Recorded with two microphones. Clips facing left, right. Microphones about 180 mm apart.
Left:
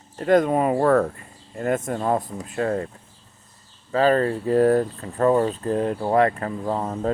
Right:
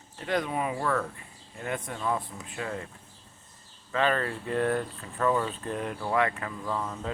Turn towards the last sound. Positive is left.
turn(degrees=45)  # may be behind; listen again after turning